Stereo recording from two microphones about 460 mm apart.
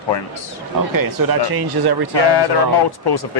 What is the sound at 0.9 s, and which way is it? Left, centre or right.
Speech, right.